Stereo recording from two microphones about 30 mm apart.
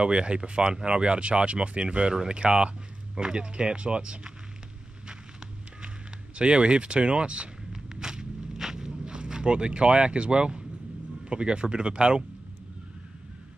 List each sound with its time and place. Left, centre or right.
0.0 s speech: right
6.3 s speech: right
7.7 s walk: right
9.0 s speech: right